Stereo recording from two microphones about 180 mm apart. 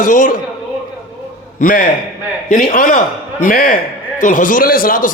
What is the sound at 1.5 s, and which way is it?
A man's voice, 50° left (ahead or behind).